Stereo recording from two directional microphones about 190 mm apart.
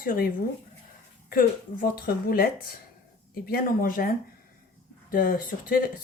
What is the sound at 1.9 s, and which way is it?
A woman's voice, 50° left (ahead or behind).